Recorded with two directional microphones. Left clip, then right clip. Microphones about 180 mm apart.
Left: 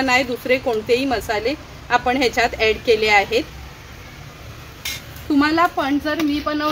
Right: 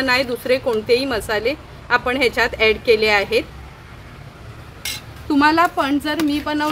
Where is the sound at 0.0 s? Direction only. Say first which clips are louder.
Even; centre (ahead or behind).